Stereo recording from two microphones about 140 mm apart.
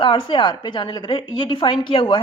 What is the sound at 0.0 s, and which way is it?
A woman's voice, 35° left (ahead or behind).